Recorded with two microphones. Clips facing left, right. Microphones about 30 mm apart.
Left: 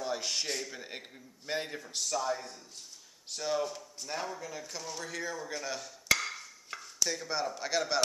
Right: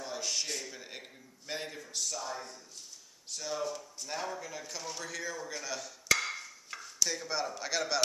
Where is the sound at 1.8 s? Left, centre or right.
Left.